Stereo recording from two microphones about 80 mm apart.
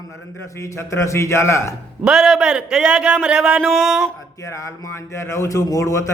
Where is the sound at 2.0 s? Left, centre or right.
Centre.